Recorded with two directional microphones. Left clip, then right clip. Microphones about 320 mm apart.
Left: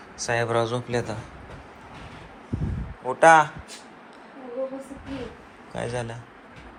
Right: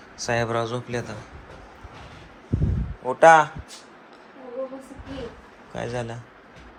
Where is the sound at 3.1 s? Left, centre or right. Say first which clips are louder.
Right 1 dB; centre.